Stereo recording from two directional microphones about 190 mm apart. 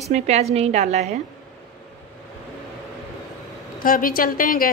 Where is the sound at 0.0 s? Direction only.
35° right (ahead or behind).